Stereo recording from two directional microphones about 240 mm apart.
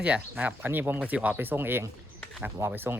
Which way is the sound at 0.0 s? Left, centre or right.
Centre.